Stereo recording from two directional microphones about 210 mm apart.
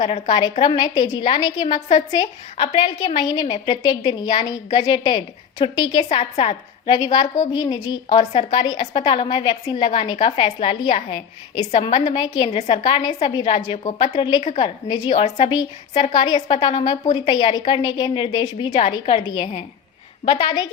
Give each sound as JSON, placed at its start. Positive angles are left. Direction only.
{"t": 0.0, "sound": "a woman's voice", "side_deg": 25}
{"t": 6.1, "sound": "a woman's voice", "side_deg": 30}
{"t": 6.9, "sound": "a woman's voice", "side_deg": 20}
{"t": 8.2, "sound": "a woman's voice", "side_deg": 35}
{"t": 8.5, "sound": "a woman's voice", "side_deg": 20}
{"t": 8.8, "sound": "a woman's voice", "side_deg": 30}